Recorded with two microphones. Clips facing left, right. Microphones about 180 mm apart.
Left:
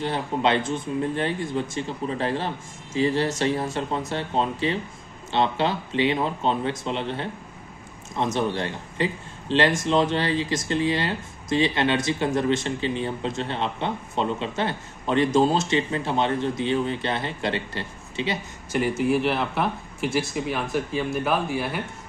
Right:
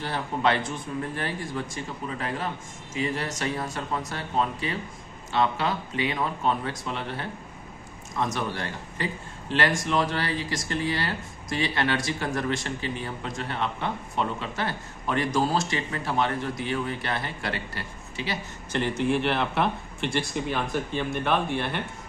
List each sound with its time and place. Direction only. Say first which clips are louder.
0.0 s a man's voice: left 2 dB; 20° left (ahead or behind)
18.7 s a man's voice: left 3 dB; 10° left (ahead or behind)